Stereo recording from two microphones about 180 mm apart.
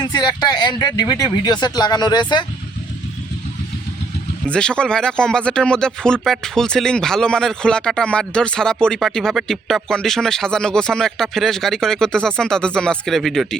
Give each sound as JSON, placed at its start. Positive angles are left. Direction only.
{"t": 0.0, "sound": "speech", "side_deg": 25}
{"t": 4.4, "sound": "speech", "side_deg": 5}